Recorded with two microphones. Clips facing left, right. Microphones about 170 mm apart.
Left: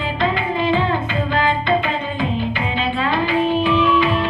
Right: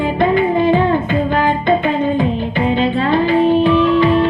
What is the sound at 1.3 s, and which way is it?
Music, 20° right (ahead or behind).